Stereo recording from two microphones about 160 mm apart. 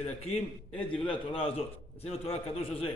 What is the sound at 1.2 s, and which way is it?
A man's voice, 35° left (ahead or behind).